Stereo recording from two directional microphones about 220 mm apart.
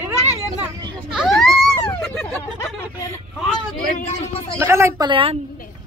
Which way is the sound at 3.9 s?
25° left (ahead or behind).